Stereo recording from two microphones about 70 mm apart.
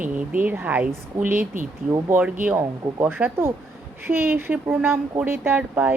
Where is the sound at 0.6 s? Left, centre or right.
Right.